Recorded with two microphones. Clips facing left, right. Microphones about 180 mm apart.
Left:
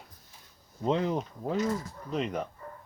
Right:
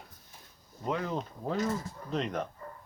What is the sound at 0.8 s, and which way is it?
Speech, 20° left (ahead or behind).